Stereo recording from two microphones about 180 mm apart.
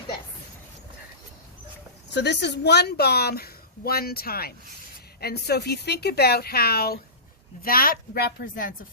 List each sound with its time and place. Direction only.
2.1 s a woman's voice: 75° left (ahead or behind); by 8.7 s 55° left (ahead or behind)